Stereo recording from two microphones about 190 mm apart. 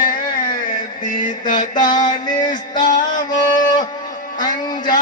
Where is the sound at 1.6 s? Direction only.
45° left (ahead or behind).